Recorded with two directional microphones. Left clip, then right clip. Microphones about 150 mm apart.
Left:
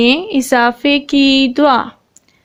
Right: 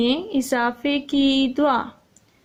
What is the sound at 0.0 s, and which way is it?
A woman's voice, 40° left (ahead or behind).